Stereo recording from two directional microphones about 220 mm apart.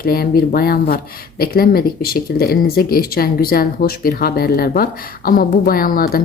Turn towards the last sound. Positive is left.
turn(degrees=40)  # may be behind; listen again after turning